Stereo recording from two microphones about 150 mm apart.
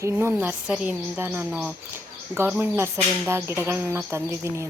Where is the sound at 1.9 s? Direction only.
15° right (ahead or behind).